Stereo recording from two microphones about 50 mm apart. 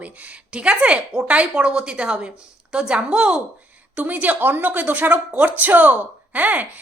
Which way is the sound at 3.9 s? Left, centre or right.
Right.